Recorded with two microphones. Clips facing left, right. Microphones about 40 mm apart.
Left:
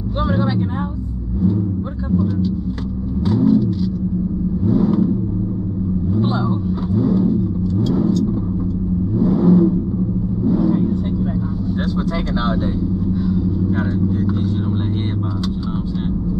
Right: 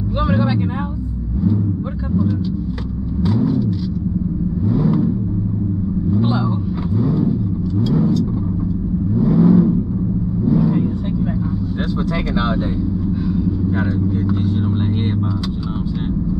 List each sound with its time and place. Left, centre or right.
0.2 s speech: centre
3.3 s vehicle: right
4.6 s vehicle: right
7.1 s vehicle: right
13.7 s speech: right